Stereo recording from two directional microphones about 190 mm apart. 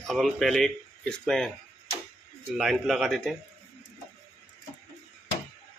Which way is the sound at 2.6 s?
Centre (ahead or behind).